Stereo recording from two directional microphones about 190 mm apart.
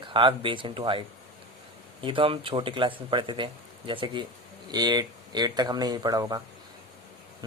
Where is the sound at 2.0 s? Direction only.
25° right (ahead or behind).